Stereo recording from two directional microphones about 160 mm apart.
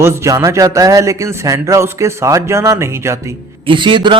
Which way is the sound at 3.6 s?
30° right (ahead or behind).